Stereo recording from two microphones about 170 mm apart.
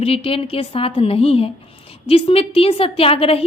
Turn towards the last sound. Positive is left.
turn(degrees=35)  # may be behind; listen again after turning